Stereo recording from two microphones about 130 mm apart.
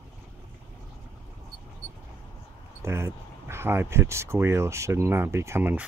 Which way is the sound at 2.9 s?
20° right (ahead or behind).